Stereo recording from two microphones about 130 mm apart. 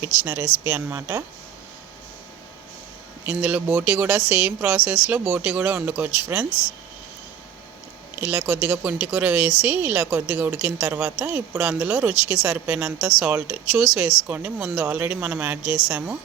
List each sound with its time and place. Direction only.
0.0 s speech: 15° right (ahead or behind)
3.2 s speech: 15° right (ahead or behind)
8.1 s speech: 15° right (ahead or behind)